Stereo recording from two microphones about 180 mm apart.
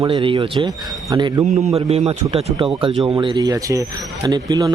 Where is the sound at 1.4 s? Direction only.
40° right (ahead or behind); by 4.7 s 20° right (ahead or behind).